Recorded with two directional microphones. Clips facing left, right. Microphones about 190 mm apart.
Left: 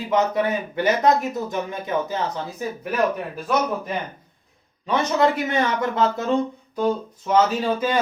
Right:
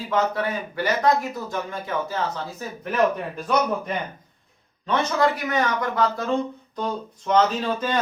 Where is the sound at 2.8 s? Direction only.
5° left (ahead or behind).